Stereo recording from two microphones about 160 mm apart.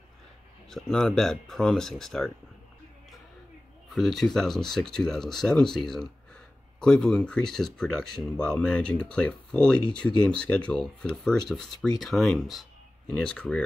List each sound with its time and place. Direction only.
0.7 s speech: 5° left (ahead or behind)
3.9 s speech: centre (ahead or behind)